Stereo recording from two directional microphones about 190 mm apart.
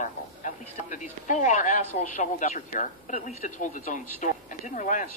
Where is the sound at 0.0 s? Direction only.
45° left (ahead or behind).